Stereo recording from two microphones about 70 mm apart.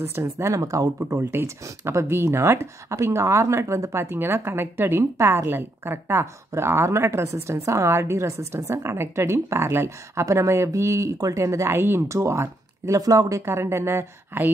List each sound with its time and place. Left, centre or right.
0.0 s speech: right
0.6 s speech: right
0.9 s speech: right
4.0 s speech: right
5.1 s a woman's voice: right
5.5 s speech: right
12.1 s speech: right
13.0 s speech: right
13.5 s speech: right